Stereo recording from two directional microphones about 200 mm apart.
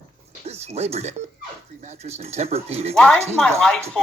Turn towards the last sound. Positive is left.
turn(degrees=5)  # may be behind; listen again after turning